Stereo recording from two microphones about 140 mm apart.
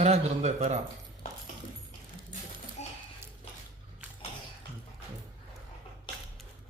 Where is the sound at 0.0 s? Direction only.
50° right (ahead or behind).